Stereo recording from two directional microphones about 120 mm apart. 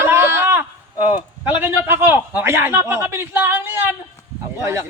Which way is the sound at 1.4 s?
15° right (ahead or behind).